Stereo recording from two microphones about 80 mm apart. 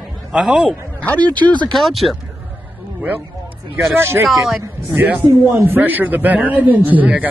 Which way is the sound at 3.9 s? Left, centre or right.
Right.